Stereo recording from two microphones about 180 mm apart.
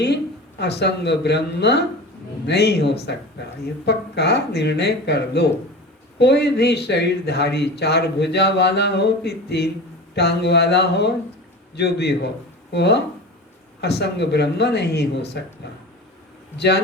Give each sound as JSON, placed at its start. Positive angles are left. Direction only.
{"t": 0.6, "sound": "speech", "side_deg": 70}
{"t": 16.6, "sound": "speech", "side_deg": 65}